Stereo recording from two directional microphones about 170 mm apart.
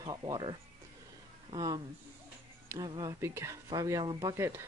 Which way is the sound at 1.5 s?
25° right (ahead or behind).